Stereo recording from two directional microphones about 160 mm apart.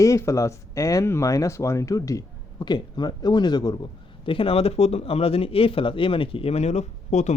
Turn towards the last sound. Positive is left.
turn(degrees=45)  # may be behind; listen again after turning